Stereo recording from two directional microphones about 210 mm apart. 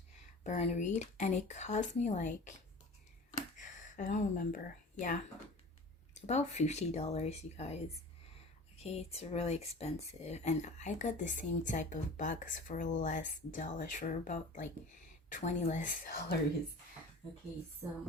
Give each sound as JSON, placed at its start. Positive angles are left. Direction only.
{"t": 0.4, "sound": "speech", "side_deg": 35}
{"t": 3.6, "sound": "speech", "side_deg": 40}
{"t": 6.2, "sound": "speech", "side_deg": 35}
{"t": 8.7, "sound": "a sound", "side_deg": 30}
{"t": 9.1, "sound": "speech", "side_deg": 30}